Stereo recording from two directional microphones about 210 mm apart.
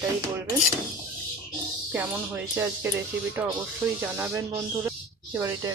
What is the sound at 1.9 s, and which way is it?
Speech, 10° right (ahead or behind).